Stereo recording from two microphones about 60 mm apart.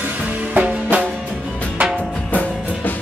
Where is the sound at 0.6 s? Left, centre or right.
Right.